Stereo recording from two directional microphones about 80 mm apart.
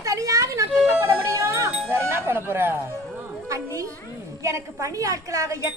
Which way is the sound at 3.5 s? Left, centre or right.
Right.